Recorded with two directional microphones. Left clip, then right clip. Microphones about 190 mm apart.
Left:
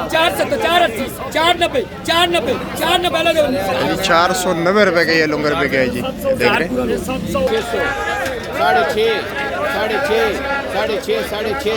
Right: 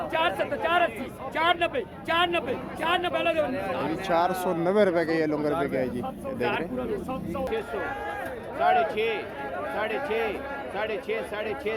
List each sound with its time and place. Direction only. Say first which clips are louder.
0.1 s speech: left 11 dB; 20° left (ahead or behind)
3.8 s speech: left 11 dB; 15° right (ahead or behind)
8.6 s speech: left 9 dB; 15° left (ahead or behind)